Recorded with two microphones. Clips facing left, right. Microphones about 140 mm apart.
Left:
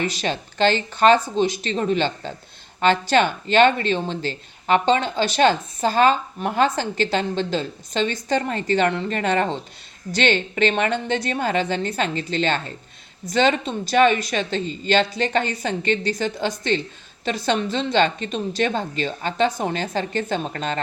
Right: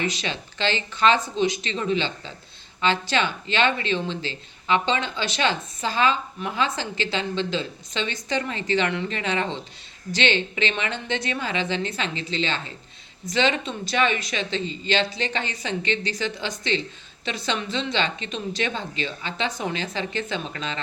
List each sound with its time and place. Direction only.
0.0 s speech: 45° left (ahead or behind)